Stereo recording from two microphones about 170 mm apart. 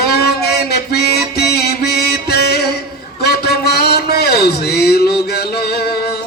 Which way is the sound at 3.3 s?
70° left (ahead or behind).